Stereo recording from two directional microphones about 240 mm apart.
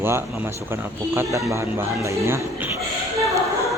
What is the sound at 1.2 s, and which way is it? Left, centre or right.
Speech, centre.